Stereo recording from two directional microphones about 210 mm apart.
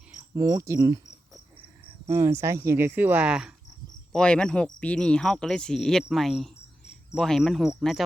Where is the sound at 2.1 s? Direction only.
15° right (ahead or behind).